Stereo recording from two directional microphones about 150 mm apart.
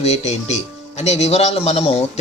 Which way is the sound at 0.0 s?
45° left (ahead or behind).